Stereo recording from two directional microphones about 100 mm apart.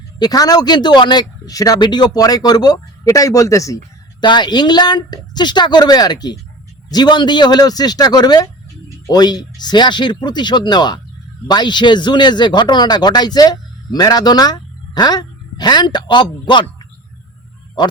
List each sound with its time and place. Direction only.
0.2 s speech: 40° left (ahead or behind)
4.2 s a man's voice: 50° left (ahead or behind)
17.8 s speech: 45° left (ahead or behind)